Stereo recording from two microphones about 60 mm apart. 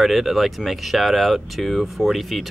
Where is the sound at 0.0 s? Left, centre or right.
Centre.